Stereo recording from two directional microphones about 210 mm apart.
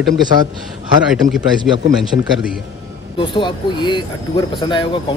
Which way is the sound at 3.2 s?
25° left (ahead or behind).